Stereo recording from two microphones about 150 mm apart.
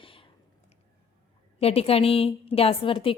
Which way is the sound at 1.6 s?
40° left (ahead or behind).